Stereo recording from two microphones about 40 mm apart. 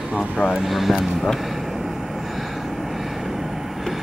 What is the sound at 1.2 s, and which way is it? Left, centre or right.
Vehicle, centre.